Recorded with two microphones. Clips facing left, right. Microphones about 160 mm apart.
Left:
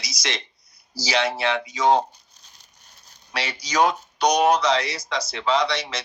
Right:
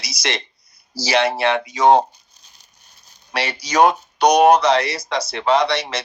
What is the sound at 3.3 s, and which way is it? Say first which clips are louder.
Speech: right 5 dB; 60° right (ahead or behind).